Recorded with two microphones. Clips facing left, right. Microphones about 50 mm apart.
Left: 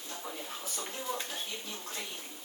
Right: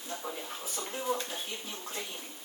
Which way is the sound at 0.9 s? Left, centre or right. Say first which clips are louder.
Right 5 dB; right.